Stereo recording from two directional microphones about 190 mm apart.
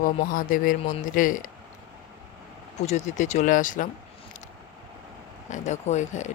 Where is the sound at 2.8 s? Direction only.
35° left (ahead or behind).